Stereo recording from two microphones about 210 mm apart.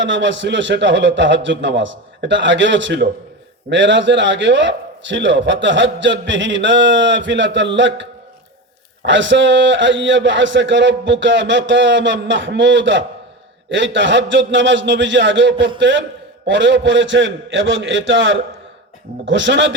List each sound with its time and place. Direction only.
0.0 s a man's voice: 60° right (ahead or behind)
9.0 s a man's voice: 60° right (ahead or behind)